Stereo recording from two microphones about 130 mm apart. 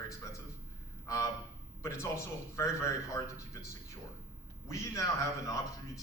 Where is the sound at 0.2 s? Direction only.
20° left (ahead or behind).